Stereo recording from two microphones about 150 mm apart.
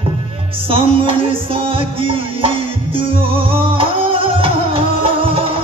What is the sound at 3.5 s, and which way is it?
Music, 35° right (ahead or behind).